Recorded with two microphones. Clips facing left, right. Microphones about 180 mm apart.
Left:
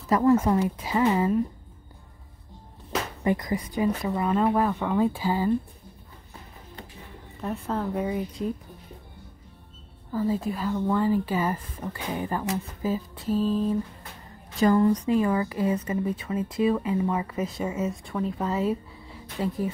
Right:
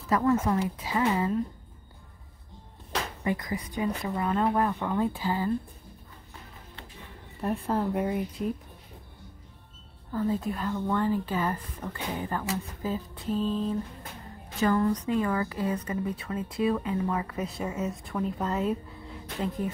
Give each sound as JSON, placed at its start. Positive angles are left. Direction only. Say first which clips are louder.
{"t": 0.1, "sound": "speech", "louder": "left 4 dB", "side_deg": 25}
{"t": 3.4, "sound": "speech", "louder": "left 5 dB", "side_deg": 35}
{"t": 4.0, "sound": "speech", "louder": "left 3 dB", "side_deg": 10}
{"t": 7.4, "sound": "speech", "louder": "right 1 dB", "side_deg": -5}
{"t": 10.1, "sound": "speech", "louder": "left 2 dB", "side_deg": 5}